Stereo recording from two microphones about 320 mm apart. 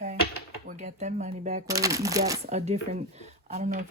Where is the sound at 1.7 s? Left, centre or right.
Centre.